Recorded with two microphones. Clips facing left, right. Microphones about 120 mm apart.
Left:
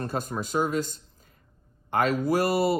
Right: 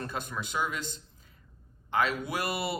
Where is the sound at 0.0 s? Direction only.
40° left (ahead or behind).